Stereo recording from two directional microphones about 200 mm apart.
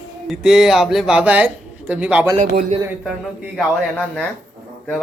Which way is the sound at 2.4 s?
35° right (ahead or behind).